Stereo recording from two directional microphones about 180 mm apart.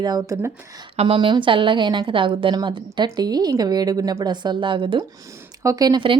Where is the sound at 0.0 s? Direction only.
20° right (ahead or behind).